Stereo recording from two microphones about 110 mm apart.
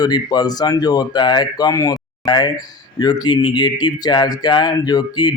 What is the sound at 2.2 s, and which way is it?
Speech, 45° left (ahead or behind).